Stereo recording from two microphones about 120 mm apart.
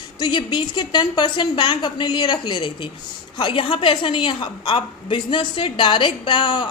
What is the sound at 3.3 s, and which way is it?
A woman's voice, 40° left (ahead or behind).